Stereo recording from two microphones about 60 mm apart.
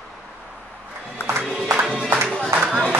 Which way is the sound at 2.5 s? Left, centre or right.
Centre.